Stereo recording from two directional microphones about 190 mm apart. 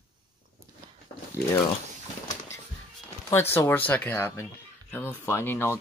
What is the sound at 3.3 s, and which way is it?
Speech, 10° left (ahead or behind).